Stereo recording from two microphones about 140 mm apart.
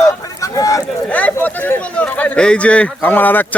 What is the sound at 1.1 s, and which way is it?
Speech, 10° left (ahead or behind).